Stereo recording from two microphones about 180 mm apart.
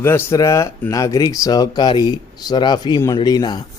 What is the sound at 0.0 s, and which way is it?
Speech, 15° left (ahead or behind).